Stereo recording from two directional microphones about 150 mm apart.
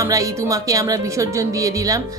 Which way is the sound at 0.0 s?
20° right (ahead or behind).